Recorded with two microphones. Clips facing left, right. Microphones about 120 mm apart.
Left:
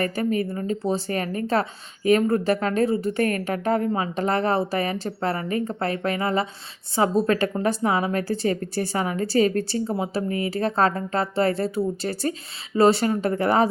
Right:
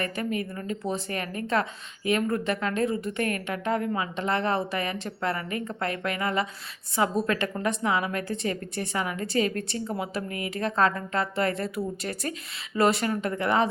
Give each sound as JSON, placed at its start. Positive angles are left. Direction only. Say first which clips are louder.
{"t": 0.0, "sound": "a woman's voice", "louder": "left 6 dB", "side_deg": 35}